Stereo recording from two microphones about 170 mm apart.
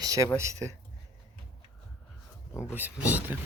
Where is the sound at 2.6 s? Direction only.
10° right (ahead or behind).